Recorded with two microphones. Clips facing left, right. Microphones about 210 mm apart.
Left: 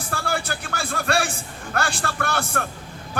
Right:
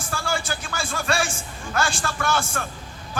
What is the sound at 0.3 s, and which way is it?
A man's voice, 60° left (ahead or behind).